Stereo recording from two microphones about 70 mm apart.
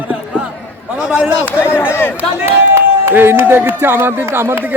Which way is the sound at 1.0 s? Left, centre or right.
Centre.